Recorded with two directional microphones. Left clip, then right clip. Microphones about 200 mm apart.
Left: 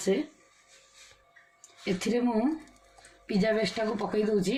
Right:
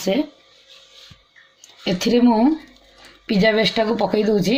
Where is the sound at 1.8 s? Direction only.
45° right (ahead or behind).